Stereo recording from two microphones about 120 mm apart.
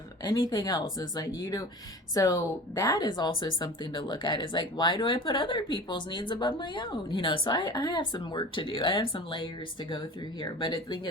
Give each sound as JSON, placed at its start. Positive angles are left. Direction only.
{"t": 0.3, "sound": "speech", "side_deg": 35}